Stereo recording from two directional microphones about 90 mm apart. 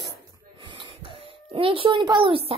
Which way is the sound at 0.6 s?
60° right (ahead or behind).